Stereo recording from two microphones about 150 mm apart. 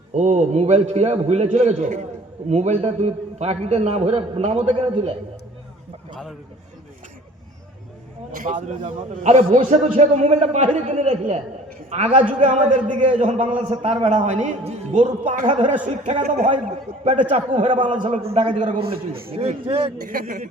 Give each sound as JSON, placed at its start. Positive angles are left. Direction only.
{"t": 0.1, "sound": "a man's voice", "side_deg": -50}
{"t": 8.3, "sound": "a man's voice", "side_deg": -60}
{"t": 17.5, "sound": "a man's voice", "side_deg": -30}
{"t": 19.3, "sound": "speech", "side_deg": -40}
{"t": 20.1, "sound": "speech", "side_deg": -70}